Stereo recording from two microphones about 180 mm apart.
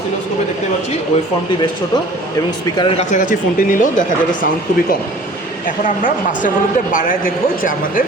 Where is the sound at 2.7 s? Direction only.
25° left (ahead or behind).